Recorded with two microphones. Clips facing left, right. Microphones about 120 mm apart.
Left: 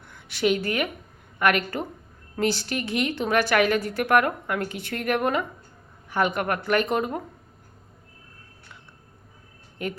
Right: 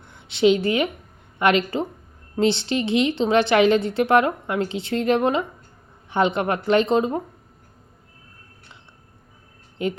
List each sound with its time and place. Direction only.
0.0 s a woman's voice: 25° right (ahead or behind)
9.8 s a woman's voice: 25° right (ahead or behind)